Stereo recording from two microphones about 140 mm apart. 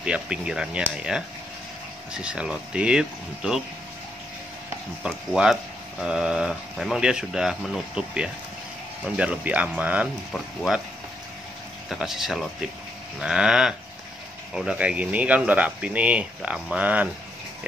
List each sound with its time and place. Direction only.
0.0 s speech: 5° right (ahead or behind)
5.0 s speech: 5° right (ahead or behind)
10.3 s speech: centre (ahead or behind)
11.9 s speech: 5° right (ahead or behind)